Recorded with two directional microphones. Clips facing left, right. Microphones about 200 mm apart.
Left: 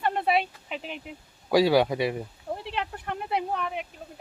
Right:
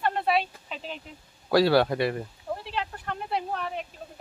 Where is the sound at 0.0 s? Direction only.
15° left (ahead or behind).